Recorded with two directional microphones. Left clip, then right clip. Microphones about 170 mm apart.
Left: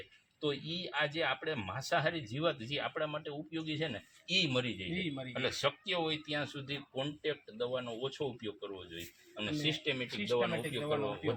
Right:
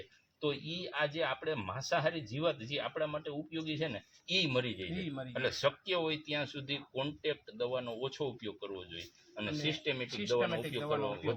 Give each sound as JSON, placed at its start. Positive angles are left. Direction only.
{"t": 0.4, "sound": "speech", "side_deg": -10}
{"t": 5.0, "sound": "a man's voice", "side_deg": 0}
{"t": 5.5, "sound": "speech", "side_deg": -15}